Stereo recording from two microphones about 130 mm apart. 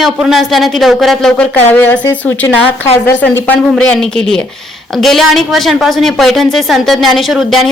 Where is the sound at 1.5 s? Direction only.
15° left (ahead or behind).